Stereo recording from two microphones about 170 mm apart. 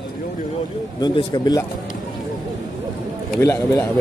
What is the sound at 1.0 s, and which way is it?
Speech, 25° left (ahead or behind).